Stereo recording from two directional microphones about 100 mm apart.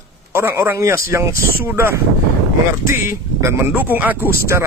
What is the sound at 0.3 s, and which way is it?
Speech, 25° right (ahead or behind).